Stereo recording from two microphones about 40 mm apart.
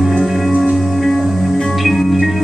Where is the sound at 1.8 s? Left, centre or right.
Centre.